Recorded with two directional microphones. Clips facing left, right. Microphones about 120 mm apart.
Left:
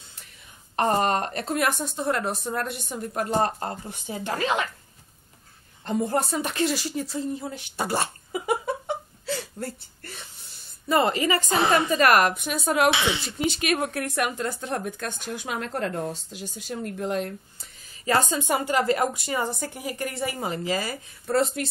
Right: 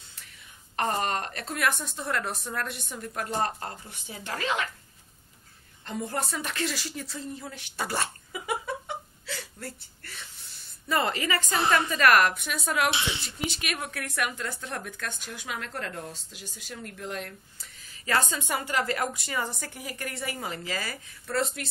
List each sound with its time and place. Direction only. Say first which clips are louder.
0.7 s a woman's voice: left 6 dB; 35° left (ahead or behind)
5.9 s a woman's voice: left 7 dB; 35° left (ahead or behind)
6.4 s a woman's voice: left 6 dB; 20° left (ahead or behind)
7.7 s a woman's voice: left 4 dB; 35° left (ahead or behind)
8.3 s a sound: left 6 dB; 35° left (ahead or behind)
10.9 s a woman's voice: left 5 dB; 25° left (ahead or behind)
11.4 s a woman's voice: left 4 dB; 80° left
11.7 s a woman's voice: left 2 dB; 25° left (ahead or behind)
12.9 s a woman's voice: left 6 dB; 90° left
13.5 s a woman's voice: left 9 dB; 30° left (ahead or behind)
15.4 s a woman's voice: left 6 dB; 35° left (ahead or behind)
16.1 s a woman's voice: left 9 dB; 25° left (ahead or behind)
16.7 s a woman's voice: left 9 dB; 35° left (ahead or behind)